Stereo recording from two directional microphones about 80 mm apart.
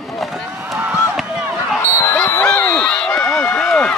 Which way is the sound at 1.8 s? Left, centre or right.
Left.